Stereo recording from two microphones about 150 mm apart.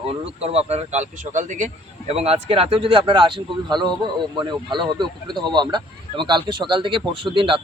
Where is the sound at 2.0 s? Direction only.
40° right (ahead or behind).